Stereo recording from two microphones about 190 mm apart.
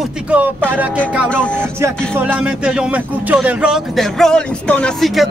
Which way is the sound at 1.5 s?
10° right (ahead or behind).